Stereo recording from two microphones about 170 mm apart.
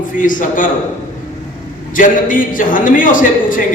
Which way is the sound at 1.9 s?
50° left (ahead or behind).